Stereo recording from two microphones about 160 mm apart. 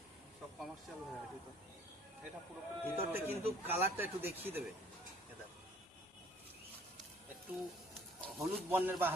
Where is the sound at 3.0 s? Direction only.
15° right (ahead or behind).